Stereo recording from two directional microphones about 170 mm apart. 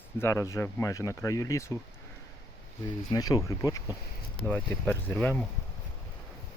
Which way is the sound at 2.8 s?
20° left (ahead or behind).